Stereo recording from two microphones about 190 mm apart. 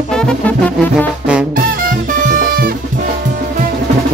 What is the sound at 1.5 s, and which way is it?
Music, 45° right (ahead or behind).